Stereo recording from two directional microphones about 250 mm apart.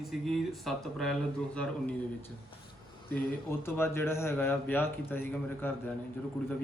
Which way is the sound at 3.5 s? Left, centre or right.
Centre.